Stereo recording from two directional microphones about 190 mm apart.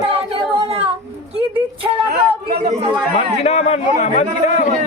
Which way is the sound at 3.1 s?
35° left (ahead or behind).